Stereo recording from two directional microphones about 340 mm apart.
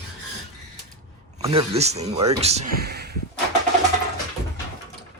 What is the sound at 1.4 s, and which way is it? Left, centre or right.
Speech, centre.